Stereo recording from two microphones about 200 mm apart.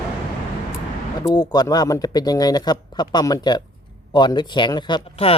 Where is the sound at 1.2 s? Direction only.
20° left (ahead or behind).